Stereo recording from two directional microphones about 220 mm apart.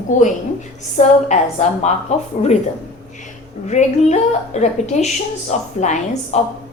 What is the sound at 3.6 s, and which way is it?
A woman's voice, 30° left (ahead or behind).